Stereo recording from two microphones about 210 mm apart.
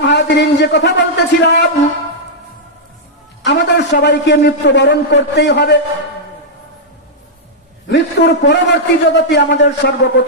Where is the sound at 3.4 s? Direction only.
55° left (ahead or behind).